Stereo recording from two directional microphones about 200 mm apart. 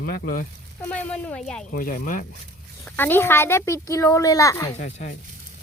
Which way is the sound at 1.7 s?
45° left (ahead or behind).